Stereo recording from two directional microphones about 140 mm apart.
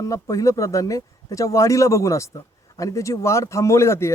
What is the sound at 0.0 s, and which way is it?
Speech, 25° left (ahead or behind).